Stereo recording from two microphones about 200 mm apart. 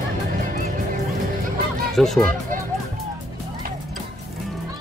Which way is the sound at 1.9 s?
Centre (ahead or behind).